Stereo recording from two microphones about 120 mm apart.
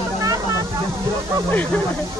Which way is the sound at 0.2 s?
30° right (ahead or behind).